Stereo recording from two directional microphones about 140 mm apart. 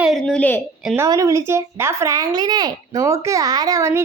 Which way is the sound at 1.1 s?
20° right (ahead or behind).